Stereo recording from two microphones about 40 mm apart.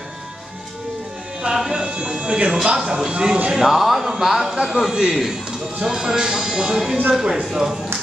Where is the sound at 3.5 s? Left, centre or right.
Centre.